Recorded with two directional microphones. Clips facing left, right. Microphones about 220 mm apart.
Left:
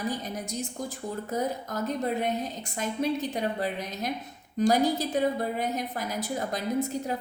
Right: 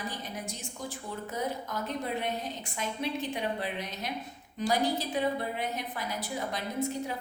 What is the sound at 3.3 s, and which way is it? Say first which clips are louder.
A woman's voice: left 3 dB; 40° left (ahead or behind).